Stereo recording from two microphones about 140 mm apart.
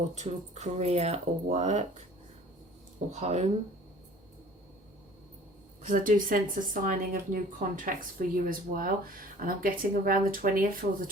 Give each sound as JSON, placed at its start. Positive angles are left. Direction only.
{"t": 0.1, "sound": "speech", "side_deg": -55}
{"t": 3.2, "sound": "speech", "side_deg": -55}
{"t": 5.8, "sound": "speech", "side_deg": -70}